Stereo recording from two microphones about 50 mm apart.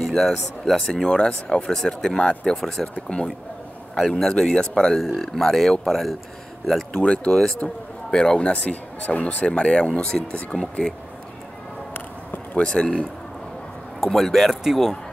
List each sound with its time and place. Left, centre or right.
0.0 s speech: centre
1.0 s a man's voice: centre
4.0 s speech: centre
6.6 s a sound: centre
7.0 s a man's voice: left
12.5 s speech: centre
14.0 s speech: centre